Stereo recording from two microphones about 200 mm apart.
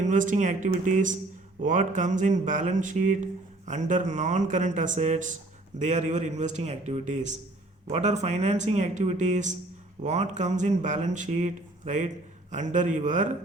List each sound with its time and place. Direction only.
0.0 s speech: 40° right (ahead or behind)